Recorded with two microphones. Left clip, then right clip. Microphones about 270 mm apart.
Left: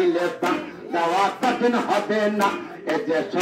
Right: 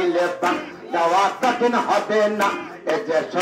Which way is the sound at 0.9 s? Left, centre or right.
Right.